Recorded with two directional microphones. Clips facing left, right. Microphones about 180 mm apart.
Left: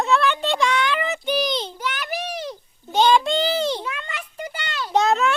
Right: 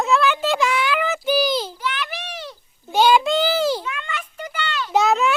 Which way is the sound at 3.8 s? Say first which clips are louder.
Right 2 dB; 35° left (ahead or behind).